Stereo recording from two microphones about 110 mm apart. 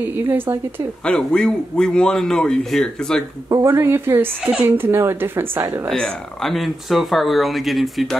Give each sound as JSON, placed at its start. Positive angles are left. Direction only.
{"t": 0.0, "sound": "speech", "side_deg": -20}
{"t": 1.0, "sound": "speech", "side_deg": 10}
{"t": 3.4, "sound": "speech", "side_deg": -30}
{"t": 5.9, "sound": "speech", "side_deg": 0}